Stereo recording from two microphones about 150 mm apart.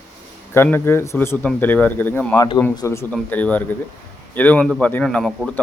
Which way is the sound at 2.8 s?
20° left (ahead or behind).